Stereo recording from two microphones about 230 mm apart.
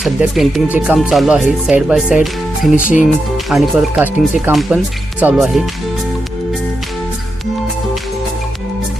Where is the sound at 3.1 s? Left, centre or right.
Centre.